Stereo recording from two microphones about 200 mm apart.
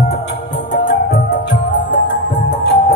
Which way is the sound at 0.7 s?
45° left (ahead or behind).